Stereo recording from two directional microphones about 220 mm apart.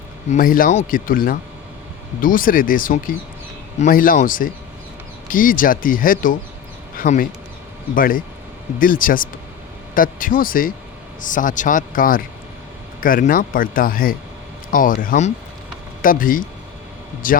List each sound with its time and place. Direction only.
0.3 s a man's voice: 40° left (ahead or behind)